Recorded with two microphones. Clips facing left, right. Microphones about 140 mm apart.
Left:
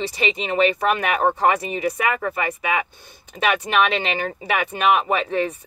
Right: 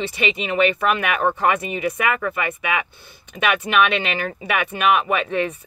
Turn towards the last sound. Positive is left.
turn(degrees=35)  # may be behind; listen again after turning